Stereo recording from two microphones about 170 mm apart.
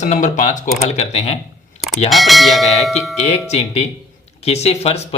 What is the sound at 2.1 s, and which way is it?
Speech, centre (ahead or behind).